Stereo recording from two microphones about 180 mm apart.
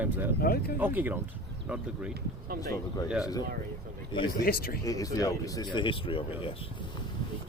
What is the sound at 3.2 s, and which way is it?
Speech, 20° left (ahead or behind).